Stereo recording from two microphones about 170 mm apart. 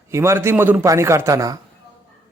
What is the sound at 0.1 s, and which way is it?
Speech, 15° right (ahead or behind).